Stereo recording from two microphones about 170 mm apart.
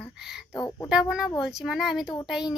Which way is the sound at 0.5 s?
15° left (ahead or behind).